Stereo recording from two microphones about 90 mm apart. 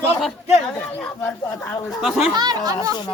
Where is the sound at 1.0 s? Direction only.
15° left (ahead or behind).